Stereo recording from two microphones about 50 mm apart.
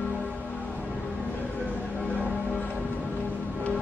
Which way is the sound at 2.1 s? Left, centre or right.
Left.